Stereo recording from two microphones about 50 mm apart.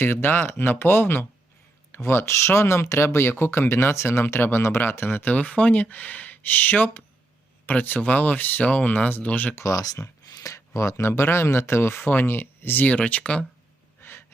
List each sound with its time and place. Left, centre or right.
0.0 s speech: left
4.4 s speech: left
5.3 s speech: left
9.6 s speech: left
12.8 s speech: left
14.0 s a sound: left